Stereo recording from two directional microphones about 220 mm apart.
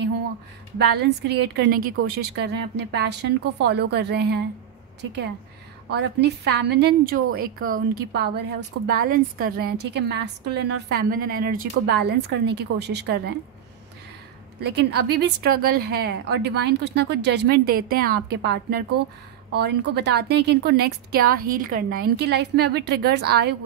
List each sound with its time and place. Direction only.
0.7 s a woman's voice: 50° right (ahead or behind)
5.9 s a woman's voice: 50° right (ahead or behind)
14.6 s a woman's voice: 50° right (ahead or behind)